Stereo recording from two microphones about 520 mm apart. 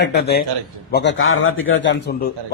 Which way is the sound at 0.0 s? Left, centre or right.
Centre.